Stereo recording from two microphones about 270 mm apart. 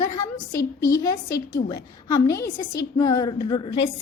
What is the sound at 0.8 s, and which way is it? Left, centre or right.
Speech, left.